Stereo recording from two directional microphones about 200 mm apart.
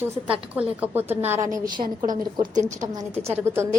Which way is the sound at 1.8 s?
40° right (ahead or behind).